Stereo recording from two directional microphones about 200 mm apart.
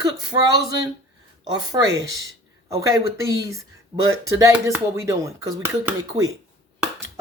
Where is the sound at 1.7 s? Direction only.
20° right (ahead or behind).